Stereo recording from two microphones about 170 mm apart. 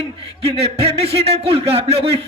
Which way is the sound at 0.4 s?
35° right (ahead or behind).